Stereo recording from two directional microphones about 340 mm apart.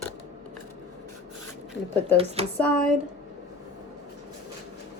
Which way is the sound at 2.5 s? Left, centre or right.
Centre.